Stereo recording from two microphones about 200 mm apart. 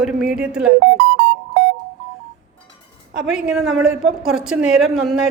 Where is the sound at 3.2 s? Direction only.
5° right (ahead or behind).